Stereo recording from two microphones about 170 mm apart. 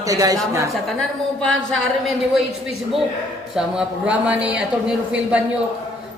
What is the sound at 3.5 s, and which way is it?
Speech, 5° right (ahead or behind).